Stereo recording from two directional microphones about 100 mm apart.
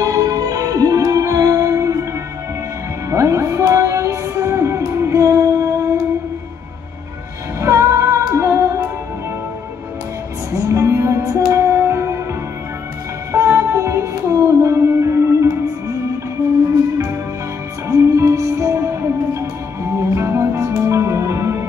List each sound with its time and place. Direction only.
0.0 s music: 35° right (ahead or behind)
3.1 s music: 30° right (ahead or behind)
7.6 s music: 30° right (ahead or behind)
10.5 s music: 30° right (ahead or behind)
13.3 s music: 30° right (ahead or behind)
17.8 s music: 30° right (ahead or behind)